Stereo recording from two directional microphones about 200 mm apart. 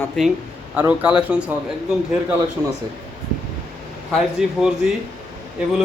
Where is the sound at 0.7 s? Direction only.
5° right (ahead or behind).